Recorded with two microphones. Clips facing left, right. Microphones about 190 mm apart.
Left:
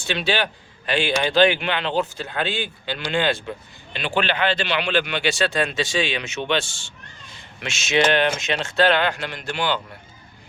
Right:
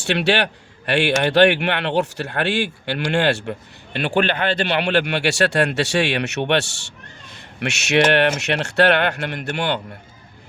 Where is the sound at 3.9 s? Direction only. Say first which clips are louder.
Right 4 dB; 60° right (ahead or behind).